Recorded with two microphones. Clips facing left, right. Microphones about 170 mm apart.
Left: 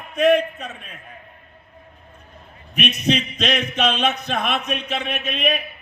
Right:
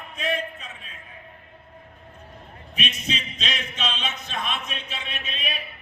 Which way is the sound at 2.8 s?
65° left (ahead or behind).